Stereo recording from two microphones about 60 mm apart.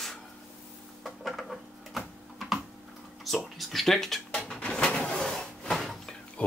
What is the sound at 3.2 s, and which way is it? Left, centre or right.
Speech, centre.